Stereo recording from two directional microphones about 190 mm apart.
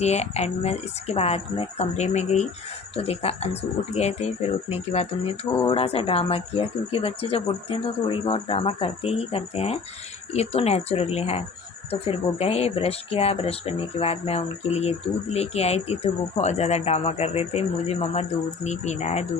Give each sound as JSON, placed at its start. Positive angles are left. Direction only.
{"t": 0.0, "sound": "speech", "side_deg": 35}